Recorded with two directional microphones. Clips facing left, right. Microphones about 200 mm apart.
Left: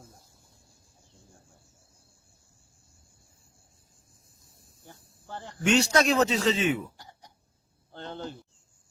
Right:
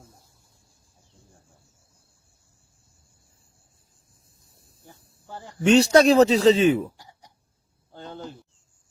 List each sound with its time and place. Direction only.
4.9 s cricket: 5° right (ahead or behind)
5.6 s speech: 35° right (ahead or behind)
6.9 s a sound: 10° right (ahead or behind)
7.9 s cricket: 5° right (ahead or behind)